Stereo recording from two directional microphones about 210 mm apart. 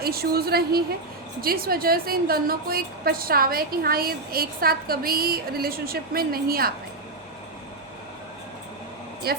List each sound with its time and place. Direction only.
0.0 s a woman's voice: 45° right (ahead or behind)
9.2 s a woman's voice: 50° right (ahead or behind)